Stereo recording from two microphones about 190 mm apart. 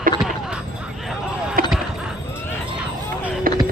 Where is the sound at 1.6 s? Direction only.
50° right (ahead or behind).